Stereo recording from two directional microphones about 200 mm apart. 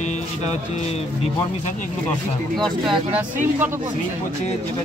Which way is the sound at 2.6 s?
5° right (ahead or behind).